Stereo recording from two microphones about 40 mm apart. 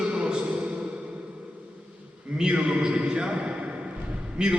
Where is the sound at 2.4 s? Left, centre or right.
Right.